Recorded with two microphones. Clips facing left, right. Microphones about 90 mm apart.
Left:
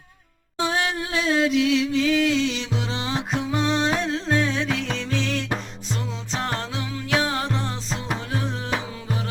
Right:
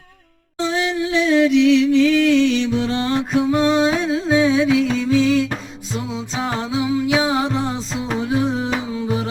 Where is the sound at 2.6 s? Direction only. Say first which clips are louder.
Right 9 dB; 15° left (ahead or behind).